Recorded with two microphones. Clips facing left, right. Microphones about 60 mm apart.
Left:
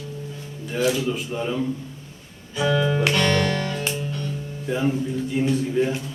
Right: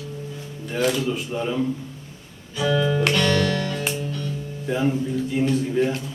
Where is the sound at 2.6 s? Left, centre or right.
Left.